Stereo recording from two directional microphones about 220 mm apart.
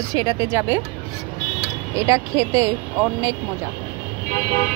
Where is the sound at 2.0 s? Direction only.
15° right (ahead or behind).